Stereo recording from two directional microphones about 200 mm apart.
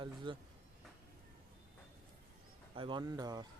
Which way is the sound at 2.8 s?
25° right (ahead or behind).